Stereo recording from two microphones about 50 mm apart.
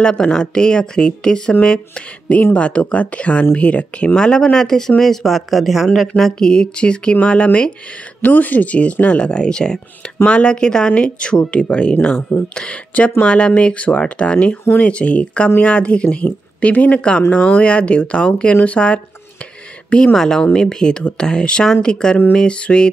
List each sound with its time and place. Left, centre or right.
0.0 s a woman's voice: centre
6.4 s speech: centre
8.2 s speech: left